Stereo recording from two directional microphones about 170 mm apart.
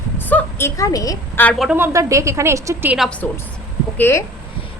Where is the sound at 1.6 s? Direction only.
15° right (ahead or behind).